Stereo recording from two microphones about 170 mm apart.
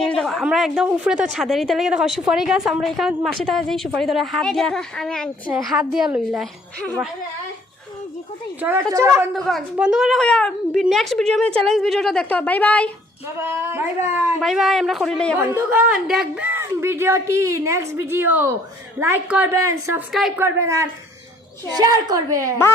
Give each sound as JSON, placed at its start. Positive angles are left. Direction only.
{"t": 0.0, "sound": "speech", "side_deg": 5}
{"t": 8.6, "sound": "a woman's voice", "side_deg": -15}
{"t": 9.3, "sound": "speech", "side_deg": 0}
{"t": 13.4, "sound": "a woman's voice", "side_deg": -15}
{"t": 14.4, "sound": "speech", "side_deg": 0}
{"t": 15.4, "sound": "a woman's voice", "side_deg": -15}
{"t": 20.1, "sound": "speech", "side_deg": 0}
{"t": 20.4, "sound": "a woman's voice", "side_deg": -15}